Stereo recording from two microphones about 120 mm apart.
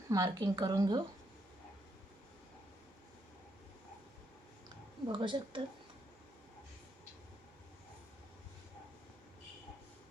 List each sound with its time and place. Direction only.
0.1 s a woman's voice: 30° right (ahead or behind)
5.0 s a woman's voice: 40° right (ahead or behind)